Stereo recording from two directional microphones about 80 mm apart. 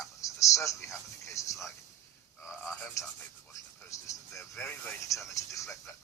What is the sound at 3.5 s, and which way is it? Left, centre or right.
Speech, left.